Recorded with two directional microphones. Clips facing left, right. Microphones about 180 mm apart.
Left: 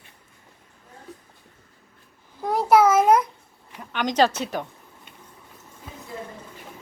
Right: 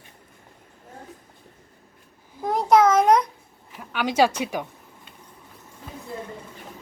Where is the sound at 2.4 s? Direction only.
5° left (ahead or behind).